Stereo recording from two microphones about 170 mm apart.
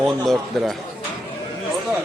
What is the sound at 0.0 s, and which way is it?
Speech, centre (ahead or behind).